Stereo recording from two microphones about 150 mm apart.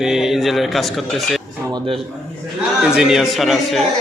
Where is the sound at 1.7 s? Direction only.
30° right (ahead or behind).